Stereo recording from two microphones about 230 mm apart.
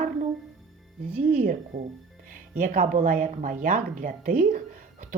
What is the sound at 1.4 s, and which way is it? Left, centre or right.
Speech, right.